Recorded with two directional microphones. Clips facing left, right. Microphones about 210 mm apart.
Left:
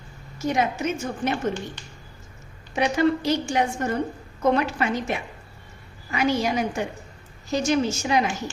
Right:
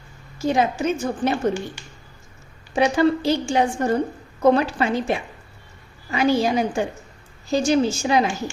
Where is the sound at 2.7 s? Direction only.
30° right (ahead or behind).